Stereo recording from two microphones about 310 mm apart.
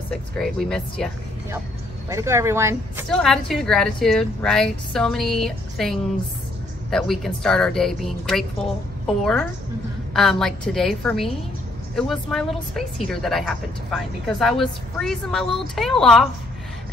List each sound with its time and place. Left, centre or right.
0.1 s a woman's voice: centre
2.0 s a woman's voice: centre